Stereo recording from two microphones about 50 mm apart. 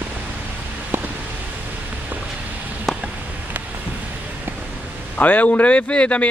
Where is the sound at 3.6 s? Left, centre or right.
Right.